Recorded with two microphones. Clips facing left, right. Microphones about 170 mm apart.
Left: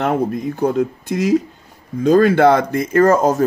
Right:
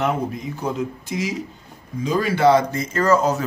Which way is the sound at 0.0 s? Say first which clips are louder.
Left 5 dB; 55° left (ahead or behind).